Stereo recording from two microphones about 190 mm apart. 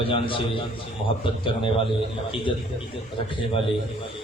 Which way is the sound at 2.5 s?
25° left (ahead or behind).